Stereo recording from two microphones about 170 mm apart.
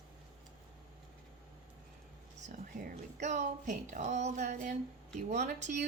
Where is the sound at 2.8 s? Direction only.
45° right (ahead or behind).